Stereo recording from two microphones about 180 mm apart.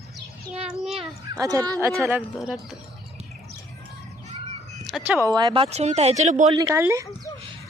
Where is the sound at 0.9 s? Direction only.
20° right (ahead or behind).